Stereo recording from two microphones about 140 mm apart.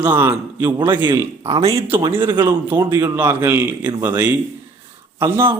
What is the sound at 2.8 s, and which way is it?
Speech, 30° right (ahead or behind).